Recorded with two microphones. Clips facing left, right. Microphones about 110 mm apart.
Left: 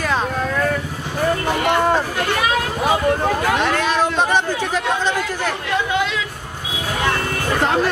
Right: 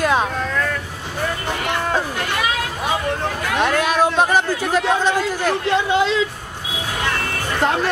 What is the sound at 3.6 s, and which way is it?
Speech, 5° right (ahead or behind).